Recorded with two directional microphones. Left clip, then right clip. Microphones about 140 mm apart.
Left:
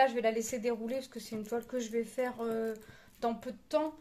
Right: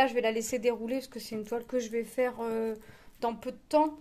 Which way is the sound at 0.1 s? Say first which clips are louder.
Right 3 dB; 90° right.